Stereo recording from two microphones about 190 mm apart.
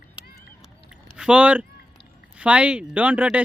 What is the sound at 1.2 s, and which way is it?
Speech, 5° right (ahead or behind).